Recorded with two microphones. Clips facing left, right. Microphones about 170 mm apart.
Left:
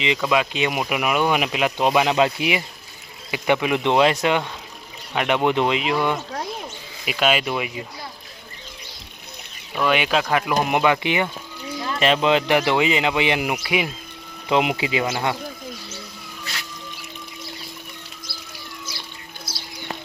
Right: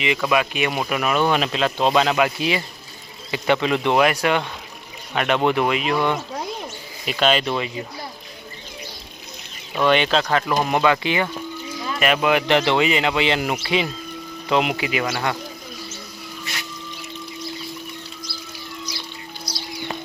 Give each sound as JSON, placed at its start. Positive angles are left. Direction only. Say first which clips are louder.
{"t": 0.0, "sound": "speech", "louder": "even", "side_deg": 20}
{"t": 7.0, "sound": "speech", "louder": "right 1 dB", "side_deg": 5}
{"t": 9.8, "sound": "speech", "louder": "right 2 dB", "side_deg": 5}